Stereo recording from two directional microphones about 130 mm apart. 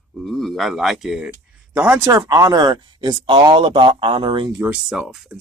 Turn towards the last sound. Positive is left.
turn(degrees=-5)  # may be behind; listen again after turning